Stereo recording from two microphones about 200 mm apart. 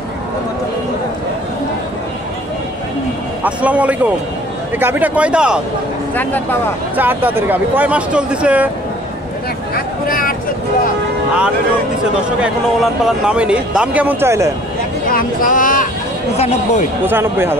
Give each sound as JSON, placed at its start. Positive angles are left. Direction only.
{"t": 3.4, "sound": "speech", "side_deg": -5}
{"t": 7.0, "sound": "speech", "side_deg": -10}
{"t": 9.8, "sound": "a sound", "side_deg": 45}
{"t": 12.4, "sound": "speech", "side_deg": -5}
{"t": 15.0, "sound": "speech", "side_deg": 45}
{"t": 17.0, "sound": "speech", "side_deg": -10}